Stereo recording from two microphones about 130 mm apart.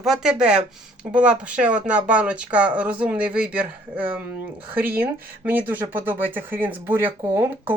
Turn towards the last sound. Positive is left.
turn(degrees=-20)  # may be behind; listen again after turning